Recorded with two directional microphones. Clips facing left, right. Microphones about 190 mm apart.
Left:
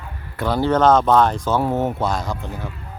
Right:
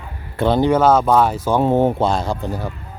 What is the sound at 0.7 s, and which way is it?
Speech, 10° right (ahead or behind).